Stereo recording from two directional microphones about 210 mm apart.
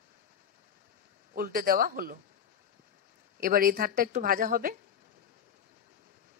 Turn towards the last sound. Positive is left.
turn(degrees=-40)  # may be behind; listen again after turning